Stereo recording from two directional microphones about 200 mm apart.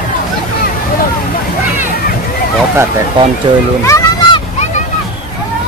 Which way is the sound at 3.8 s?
15° left (ahead or behind).